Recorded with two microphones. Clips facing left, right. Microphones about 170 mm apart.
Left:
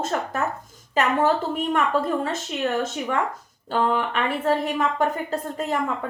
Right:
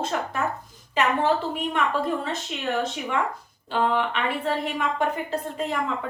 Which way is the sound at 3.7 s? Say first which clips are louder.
Left 1 dB; 45° left (ahead or behind).